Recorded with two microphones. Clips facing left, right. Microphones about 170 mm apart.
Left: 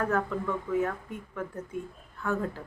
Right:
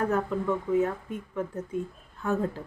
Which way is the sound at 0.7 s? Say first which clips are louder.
Right 2 dB; 20° right (ahead or behind).